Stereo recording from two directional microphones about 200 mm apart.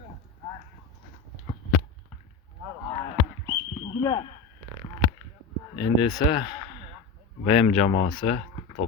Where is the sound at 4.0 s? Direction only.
20° left (ahead or behind).